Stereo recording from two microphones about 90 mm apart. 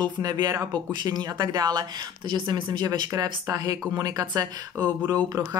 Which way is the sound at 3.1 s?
40° right (ahead or behind).